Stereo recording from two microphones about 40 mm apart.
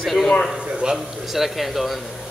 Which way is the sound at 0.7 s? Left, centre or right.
Right.